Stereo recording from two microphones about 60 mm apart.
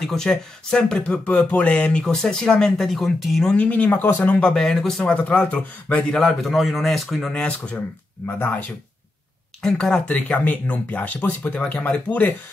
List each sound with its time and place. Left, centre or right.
0.0 s speech: centre
3.4 s speech: left
4.3 s speech: centre
5.1 s speech: left
6.4 s speech: centre
8.3 s speech: left
9.6 s speech: centre
10.1 s speech: left